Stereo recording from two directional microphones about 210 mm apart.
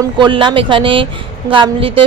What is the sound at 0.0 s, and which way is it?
A woman's voice, 20° right (ahead or behind).